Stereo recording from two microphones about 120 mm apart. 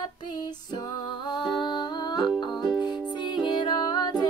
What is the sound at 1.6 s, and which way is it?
Music, 40° left (ahead or behind).